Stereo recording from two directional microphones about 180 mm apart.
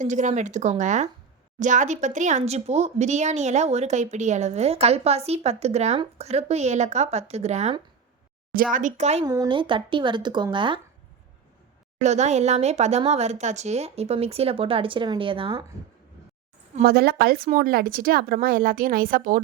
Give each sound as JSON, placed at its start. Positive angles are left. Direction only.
{"t": 0.0, "sound": "speech", "side_deg": -45}
{"t": 8.5, "sound": "speech", "side_deg": -50}
{"t": 9.2, "sound": "speech", "side_deg": -20}
{"t": 12.0, "sound": "speech", "side_deg": -40}
{"t": 16.8, "sound": "speech", "side_deg": -60}